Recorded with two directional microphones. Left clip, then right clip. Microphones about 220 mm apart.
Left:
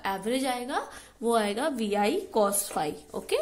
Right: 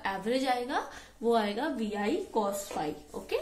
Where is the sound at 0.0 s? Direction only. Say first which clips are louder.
Left 2 dB; 25° left (ahead or behind).